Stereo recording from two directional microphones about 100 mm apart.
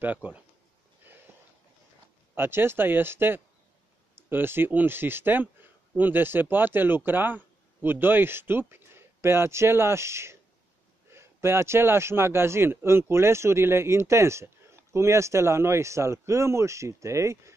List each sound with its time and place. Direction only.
0.0 s speech: 15° right (ahead or behind)
1.1 s a sound: 20° right (ahead or behind)
2.3 s a man's voice: 25° right (ahead or behind)